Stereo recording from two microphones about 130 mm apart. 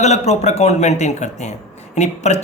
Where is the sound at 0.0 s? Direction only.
60° left (ahead or behind).